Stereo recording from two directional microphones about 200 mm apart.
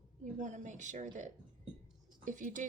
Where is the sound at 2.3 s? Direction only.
40° right (ahead or behind).